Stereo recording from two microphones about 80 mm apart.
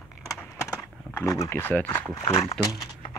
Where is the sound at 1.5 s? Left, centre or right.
Left.